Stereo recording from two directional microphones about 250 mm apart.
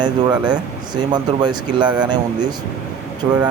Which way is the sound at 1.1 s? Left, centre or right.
Centre.